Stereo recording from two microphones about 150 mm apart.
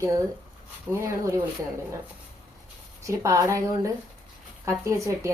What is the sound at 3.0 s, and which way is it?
Dishes, 20° right (ahead or behind).